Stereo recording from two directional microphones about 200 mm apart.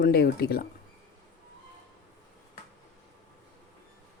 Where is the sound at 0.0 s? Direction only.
50° left (ahead or behind).